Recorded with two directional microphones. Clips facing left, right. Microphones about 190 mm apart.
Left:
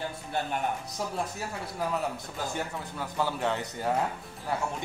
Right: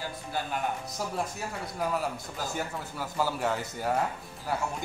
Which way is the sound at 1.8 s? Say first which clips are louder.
Even; centre (ahead or behind).